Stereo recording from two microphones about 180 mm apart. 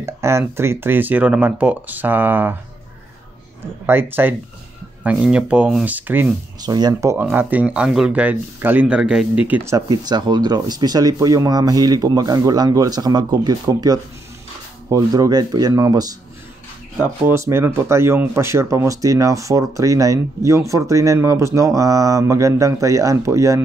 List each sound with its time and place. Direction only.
0.0 s speech: 15° right (ahead or behind)
3.8 s speech: 10° right (ahead or behind)
6.6 s speech: 20° right (ahead or behind)
9.8 s speech: 20° right (ahead or behind)
17.3 s speech: 15° right (ahead or behind)